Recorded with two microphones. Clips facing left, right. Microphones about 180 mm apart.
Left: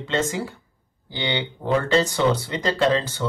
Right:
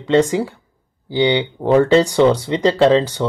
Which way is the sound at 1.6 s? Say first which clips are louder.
Right 7 dB; 55° right (ahead or behind).